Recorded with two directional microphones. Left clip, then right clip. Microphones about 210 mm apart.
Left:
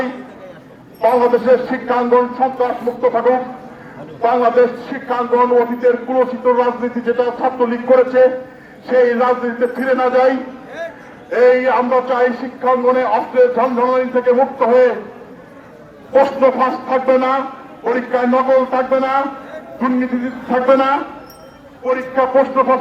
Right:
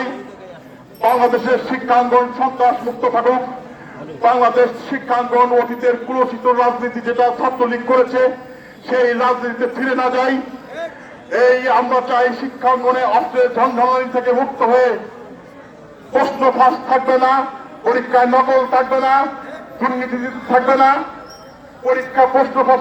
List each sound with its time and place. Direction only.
1.0 s a man's voice: 20° right (ahead or behind)
16.1 s a man's voice: 25° right (ahead or behind)
22.6 s a man's voice: 25° right (ahead or behind)